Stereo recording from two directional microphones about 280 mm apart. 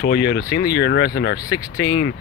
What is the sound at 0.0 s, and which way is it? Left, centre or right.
Speech, left.